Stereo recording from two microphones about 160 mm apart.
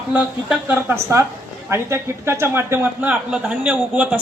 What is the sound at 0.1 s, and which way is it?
A woman's voice, 10° right (ahead or behind).